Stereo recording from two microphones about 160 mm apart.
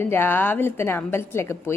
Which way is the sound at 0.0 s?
15° left (ahead or behind).